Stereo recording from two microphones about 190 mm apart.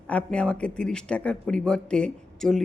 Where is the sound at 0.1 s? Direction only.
5° left (ahead or behind).